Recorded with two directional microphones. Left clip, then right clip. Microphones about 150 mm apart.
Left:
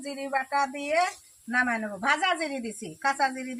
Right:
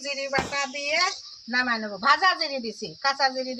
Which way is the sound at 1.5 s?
Centre (ahead or behind).